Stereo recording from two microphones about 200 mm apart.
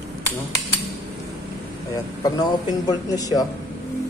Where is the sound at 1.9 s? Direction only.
20° left (ahead or behind).